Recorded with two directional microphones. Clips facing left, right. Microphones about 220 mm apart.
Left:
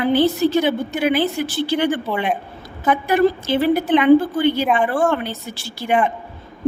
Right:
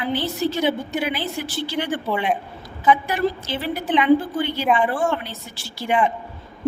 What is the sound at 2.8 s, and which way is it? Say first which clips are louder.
A woman's voice: left 3 dB; 55° left (ahead or behind).